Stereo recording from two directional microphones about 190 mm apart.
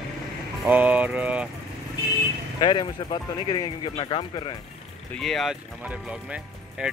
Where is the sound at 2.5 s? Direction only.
25° left (ahead or behind).